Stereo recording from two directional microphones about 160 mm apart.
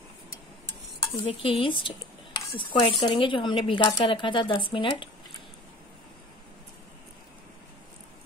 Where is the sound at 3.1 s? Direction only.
30° left (ahead or behind).